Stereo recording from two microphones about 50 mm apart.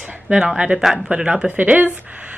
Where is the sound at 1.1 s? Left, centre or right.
Centre.